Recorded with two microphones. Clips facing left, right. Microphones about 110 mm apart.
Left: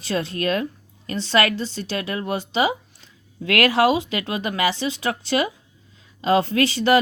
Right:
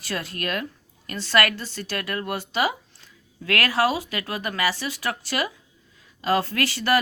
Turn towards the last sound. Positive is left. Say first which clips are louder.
# left 5 dB
turn(degrees=20)  # may be behind; listen again after turning